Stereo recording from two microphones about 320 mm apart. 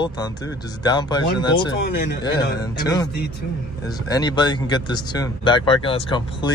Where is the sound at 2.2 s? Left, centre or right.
Centre.